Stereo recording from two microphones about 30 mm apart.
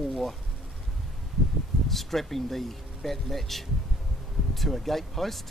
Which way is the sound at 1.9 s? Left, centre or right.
Centre.